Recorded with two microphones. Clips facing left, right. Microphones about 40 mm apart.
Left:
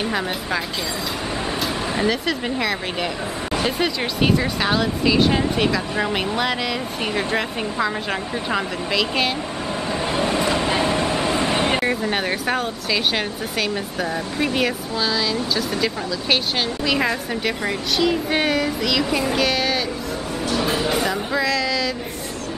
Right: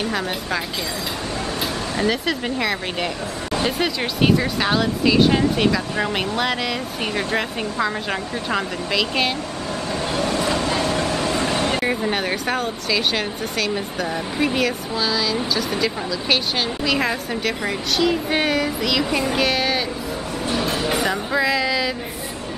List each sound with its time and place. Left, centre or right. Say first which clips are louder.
0.0 s speech: even; centre
2.0 s speech: right 2 dB; centre
10.1 s vehicle: left 1 dB; centre
11.8 s speech: even; centre
16.8 s speech: left 1 dB; centre
20.6 s a sound: left 1 dB; centre
20.9 s speech: even; centre